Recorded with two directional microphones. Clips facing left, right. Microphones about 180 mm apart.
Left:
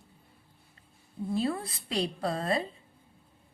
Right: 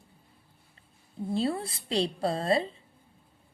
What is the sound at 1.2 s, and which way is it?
A woman's voice, 30° right (ahead or behind).